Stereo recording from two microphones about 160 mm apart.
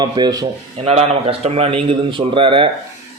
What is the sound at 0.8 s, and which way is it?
A man's voice, 40° right (ahead or behind).